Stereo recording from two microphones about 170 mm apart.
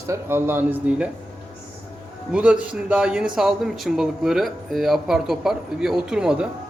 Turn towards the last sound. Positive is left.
turn(degrees=-5)  # may be behind; listen again after turning